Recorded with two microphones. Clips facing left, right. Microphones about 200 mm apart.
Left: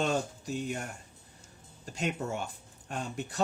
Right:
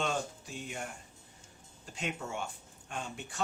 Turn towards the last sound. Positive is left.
turn(degrees=40)  # may be behind; listen again after turning